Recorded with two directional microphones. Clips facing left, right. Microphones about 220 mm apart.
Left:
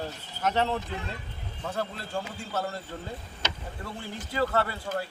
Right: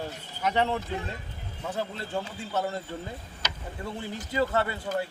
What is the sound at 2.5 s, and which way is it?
Speech, 20° right (ahead or behind).